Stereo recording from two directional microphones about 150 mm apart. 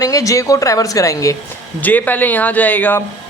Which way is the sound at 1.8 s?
10° left (ahead or behind).